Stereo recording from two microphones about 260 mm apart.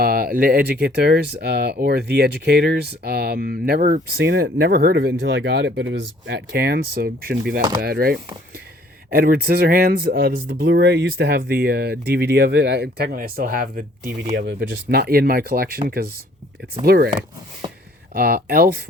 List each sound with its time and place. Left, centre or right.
0.0 s speech: right
18.1 s speech: right